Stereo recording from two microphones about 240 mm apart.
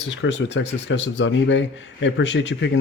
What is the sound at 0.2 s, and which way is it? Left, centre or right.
Speech, left.